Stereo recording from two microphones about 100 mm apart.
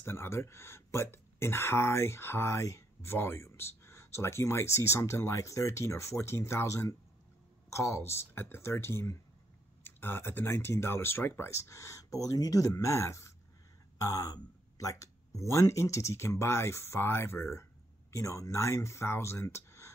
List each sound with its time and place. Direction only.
0.0 s speech: 25° left (ahead or behind)